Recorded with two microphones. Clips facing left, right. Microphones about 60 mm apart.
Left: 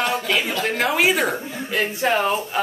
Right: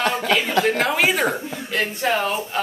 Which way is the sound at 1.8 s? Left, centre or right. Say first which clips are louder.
Left 2 dB; centre.